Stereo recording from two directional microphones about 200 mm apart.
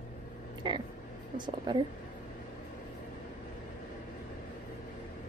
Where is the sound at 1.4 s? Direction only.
25° right (ahead or behind).